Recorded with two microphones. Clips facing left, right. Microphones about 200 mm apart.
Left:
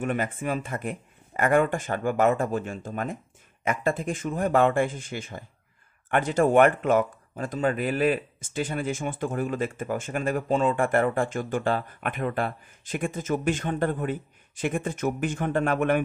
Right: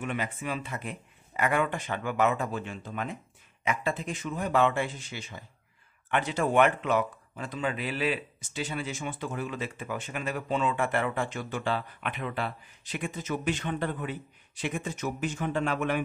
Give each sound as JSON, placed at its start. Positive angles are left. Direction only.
{"t": 0.0, "sound": "speech", "side_deg": 50}